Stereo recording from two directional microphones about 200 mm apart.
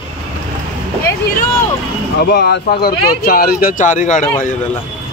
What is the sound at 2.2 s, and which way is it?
Speech, 55° left (ahead or behind).